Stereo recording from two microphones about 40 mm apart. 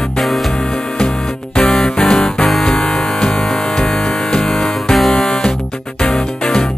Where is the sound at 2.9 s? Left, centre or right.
Centre.